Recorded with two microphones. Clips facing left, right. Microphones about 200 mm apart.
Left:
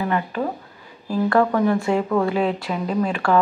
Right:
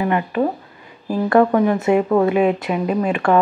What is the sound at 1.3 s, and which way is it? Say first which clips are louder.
Speech: right 4 dB; 20° right (ahead or behind).